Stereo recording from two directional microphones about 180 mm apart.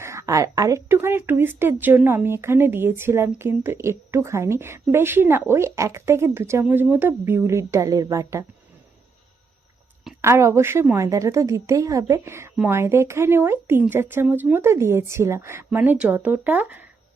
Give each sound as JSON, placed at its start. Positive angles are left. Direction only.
{"t": 0.0, "sound": "a woman's voice", "side_deg": -15}
{"t": 10.2, "sound": "a woman's voice", "side_deg": -15}